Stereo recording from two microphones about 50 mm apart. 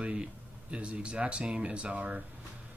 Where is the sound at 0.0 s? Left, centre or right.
Right.